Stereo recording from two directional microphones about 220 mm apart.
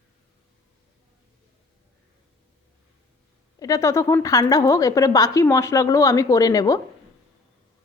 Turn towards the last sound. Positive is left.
turn(degrees=15)  # may be behind; listen again after turning